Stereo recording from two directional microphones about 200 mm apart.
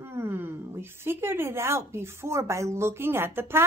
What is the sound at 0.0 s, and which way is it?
A woman's voice, 10° right (ahead or behind).